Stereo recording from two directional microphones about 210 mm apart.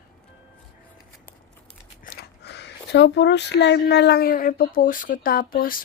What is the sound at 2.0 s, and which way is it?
Speech, 50° left (ahead or behind).